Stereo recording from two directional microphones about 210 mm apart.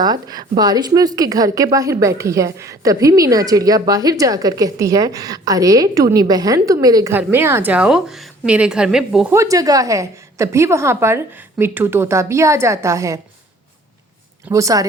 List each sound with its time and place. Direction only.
0.0 s a woman's voice: 20° right (ahead or behind)
14.5 s a woman's voice: 15° right (ahead or behind)